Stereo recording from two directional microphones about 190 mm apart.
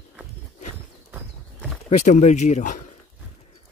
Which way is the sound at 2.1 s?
40° left (ahead or behind).